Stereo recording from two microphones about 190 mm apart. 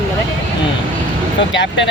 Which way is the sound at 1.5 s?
75° left (ahead or behind).